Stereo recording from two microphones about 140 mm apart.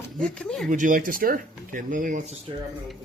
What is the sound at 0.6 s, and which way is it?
Speech, 70° right (ahead or behind).